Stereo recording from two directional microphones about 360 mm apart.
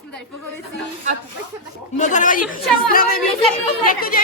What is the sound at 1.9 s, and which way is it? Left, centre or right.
A woman's voice, centre.